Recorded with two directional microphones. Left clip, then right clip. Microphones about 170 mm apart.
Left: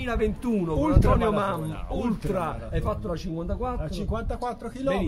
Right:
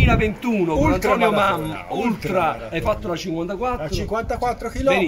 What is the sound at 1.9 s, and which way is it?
Speech, 30° left (ahead or behind).